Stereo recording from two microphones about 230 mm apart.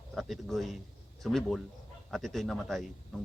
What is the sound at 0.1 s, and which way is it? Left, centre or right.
A man's voice, centre.